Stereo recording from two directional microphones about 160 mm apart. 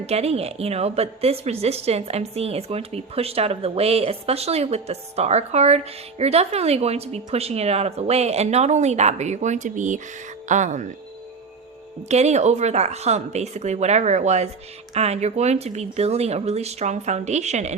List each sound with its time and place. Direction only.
0.0 s a woman's voice: 40° right (ahead or behind)
12.0 s speech: 45° right (ahead or behind)